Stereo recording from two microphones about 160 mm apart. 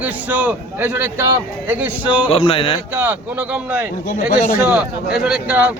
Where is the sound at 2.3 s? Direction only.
35° left (ahead or behind).